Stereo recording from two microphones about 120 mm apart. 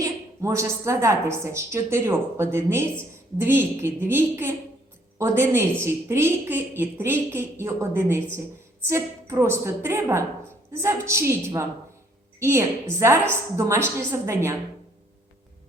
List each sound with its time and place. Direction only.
0.0 s a woman's voice: 25° right (ahead or behind)